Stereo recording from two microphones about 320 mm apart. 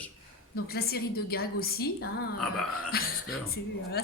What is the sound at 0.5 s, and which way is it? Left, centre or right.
A woman's voice, left.